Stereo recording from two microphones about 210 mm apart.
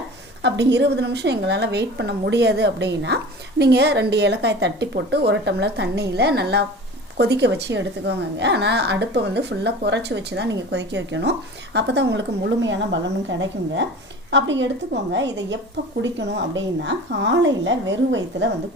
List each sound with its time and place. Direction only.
0.4 s a woman's voice: 55° right (ahead or behind)